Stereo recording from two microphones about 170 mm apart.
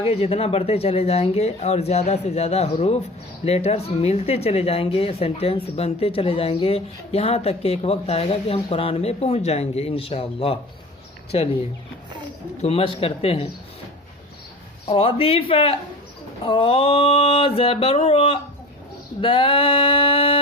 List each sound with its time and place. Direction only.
0.0 s speech: 35° left (ahead or behind)
12.6 s speech: 35° left (ahead or behind)
14.8 s speech: 35° left (ahead or behind)